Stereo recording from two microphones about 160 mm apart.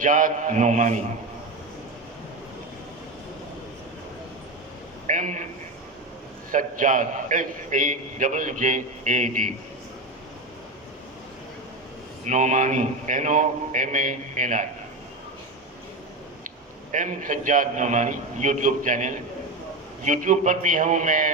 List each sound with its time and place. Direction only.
0.0 s a man's voice: 55° right (ahead or behind)
5.0 s a sound: 50° right (ahead or behind)
6.5 s a man's voice: 55° right (ahead or behind)
12.2 s a man's voice: 50° right (ahead or behind)
16.9 s a man's voice: 55° right (ahead or behind)